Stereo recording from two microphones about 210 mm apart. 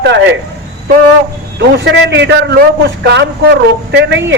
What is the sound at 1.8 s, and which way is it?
A man's voice, 55° right (ahead or behind).